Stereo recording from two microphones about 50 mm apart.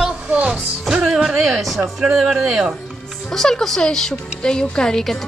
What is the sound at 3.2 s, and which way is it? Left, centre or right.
Speech, centre.